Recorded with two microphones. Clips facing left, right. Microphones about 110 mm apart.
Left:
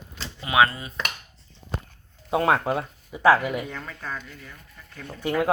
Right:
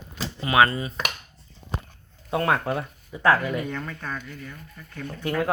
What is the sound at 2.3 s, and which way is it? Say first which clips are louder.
Speech: left 2 dB; 15° left (ahead or behind).